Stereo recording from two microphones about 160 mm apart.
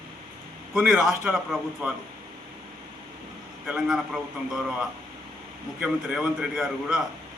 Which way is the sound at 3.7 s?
5° right (ahead or behind).